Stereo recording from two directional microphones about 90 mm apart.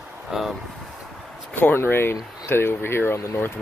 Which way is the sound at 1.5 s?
25° left (ahead or behind).